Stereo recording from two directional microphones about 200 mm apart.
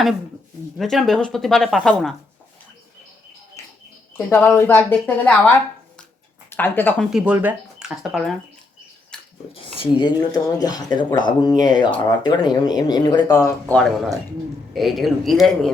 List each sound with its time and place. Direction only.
0.8 s speech: centre (ahead or behind)
3.6 s bird: 15° left (ahead or behind)
4.3 s speech: 10° left (ahead or behind)
6.5 s speech: 10° left (ahead or behind)
7.1 s speech: 5° right (ahead or behind)
9.1 s a sound: 5° left (ahead or behind)
9.5 s speech: 25° left (ahead or behind)
13.7 s speech: centre (ahead or behind)